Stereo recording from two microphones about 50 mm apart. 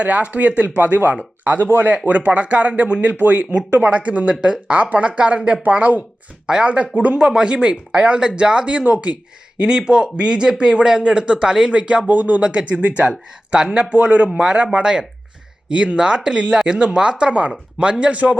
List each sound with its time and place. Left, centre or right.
0.0 s speech: right
4.4 s speech: centre
4.7 s speech: right
7.2 s speech: centre
12.0 s speech: right
12.7 s speech: right
13.1 s speech: centre
13.9 s speech: right
14.3 s speech: centre